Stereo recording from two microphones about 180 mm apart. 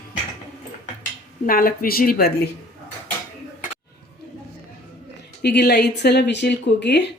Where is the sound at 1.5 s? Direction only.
55° left (ahead or behind).